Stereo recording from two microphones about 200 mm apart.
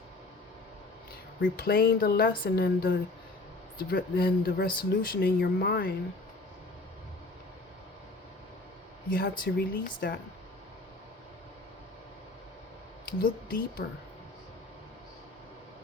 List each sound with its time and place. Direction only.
1.4 s speech: 50° left (ahead or behind)
9.0 s speech: 50° left (ahead or behind)
13.1 s speech: 45° left (ahead or behind)